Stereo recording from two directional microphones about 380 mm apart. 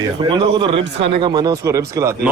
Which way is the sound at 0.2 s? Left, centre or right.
Centre.